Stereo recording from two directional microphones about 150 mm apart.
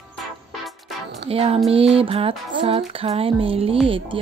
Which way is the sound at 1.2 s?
40° right (ahead or behind).